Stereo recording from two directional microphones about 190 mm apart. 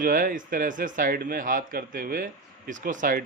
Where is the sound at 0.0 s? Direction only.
45° right (ahead or behind).